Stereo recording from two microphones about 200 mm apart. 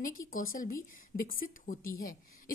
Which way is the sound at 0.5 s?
45° left (ahead or behind).